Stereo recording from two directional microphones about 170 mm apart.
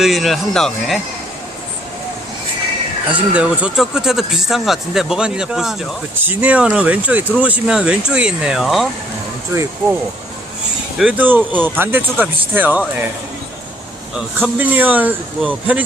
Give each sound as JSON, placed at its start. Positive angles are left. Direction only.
{"t": 0.0, "sound": "speech", "side_deg": 0}
{"t": 3.1, "sound": "speech", "side_deg": -10}
{"t": 9.5, "sound": "speech", "side_deg": -20}
{"t": 10.9, "sound": "speech", "side_deg": -10}
{"t": 14.3, "sound": "speech", "side_deg": -10}